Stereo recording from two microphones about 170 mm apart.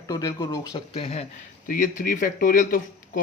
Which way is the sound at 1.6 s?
55° left (ahead or behind).